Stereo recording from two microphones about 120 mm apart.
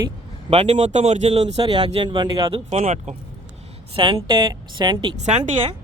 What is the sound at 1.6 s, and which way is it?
Speech, 40° right (ahead or behind).